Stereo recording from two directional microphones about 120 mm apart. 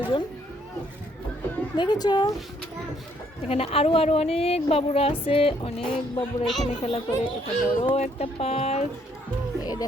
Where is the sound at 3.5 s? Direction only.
55° left (ahead or behind).